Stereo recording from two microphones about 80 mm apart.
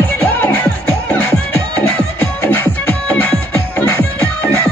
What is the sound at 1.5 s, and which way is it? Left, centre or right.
Music, left.